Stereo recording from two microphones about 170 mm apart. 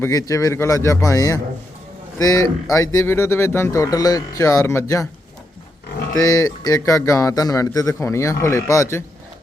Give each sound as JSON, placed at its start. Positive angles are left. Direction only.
{"t": 0.0, "sound": "speech", "side_deg": 20}
{"t": 6.3, "sound": "speech", "side_deg": 20}